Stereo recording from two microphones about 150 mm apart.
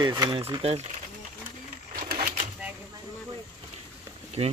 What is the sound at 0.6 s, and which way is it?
Speech, 45° right (ahead or behind).